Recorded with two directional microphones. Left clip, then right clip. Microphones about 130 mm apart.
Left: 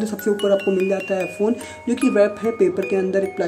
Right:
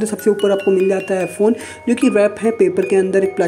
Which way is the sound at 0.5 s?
Centre (ahead or behind).